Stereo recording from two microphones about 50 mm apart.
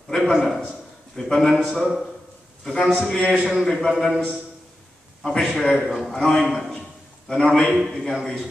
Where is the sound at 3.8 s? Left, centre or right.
Centre.